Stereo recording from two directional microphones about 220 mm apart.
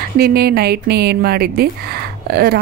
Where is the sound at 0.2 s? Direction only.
45° right (ahead or behind).